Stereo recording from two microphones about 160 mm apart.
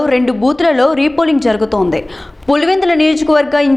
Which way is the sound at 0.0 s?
Centre (ahead or behind).